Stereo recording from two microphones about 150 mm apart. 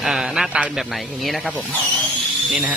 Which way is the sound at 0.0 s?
5° right (ahead or behind).